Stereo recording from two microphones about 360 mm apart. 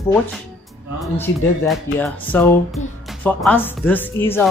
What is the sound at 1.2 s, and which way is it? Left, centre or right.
Speech, centre.